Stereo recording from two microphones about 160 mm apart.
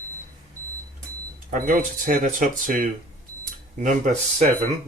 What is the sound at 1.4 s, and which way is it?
Speech, 60° right (ahead or behind).